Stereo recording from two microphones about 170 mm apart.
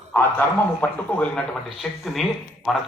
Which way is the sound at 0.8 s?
10° left (ahead or behind).